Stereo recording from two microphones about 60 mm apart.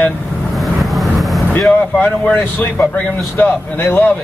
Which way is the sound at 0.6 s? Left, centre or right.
Centre.